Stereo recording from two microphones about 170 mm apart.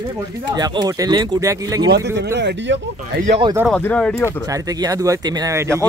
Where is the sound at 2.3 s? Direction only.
90° right.